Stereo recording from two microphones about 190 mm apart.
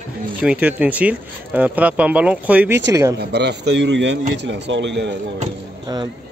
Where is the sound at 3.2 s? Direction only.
60° right (ahead or behind).